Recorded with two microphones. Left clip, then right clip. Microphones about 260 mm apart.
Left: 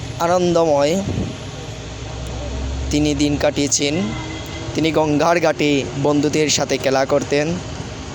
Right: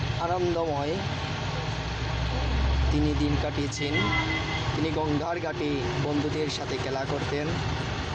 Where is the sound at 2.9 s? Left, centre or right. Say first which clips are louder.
Left 11 dB; left.